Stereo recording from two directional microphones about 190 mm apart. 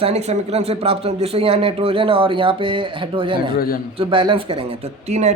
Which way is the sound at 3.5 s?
50° left (ahead or behind).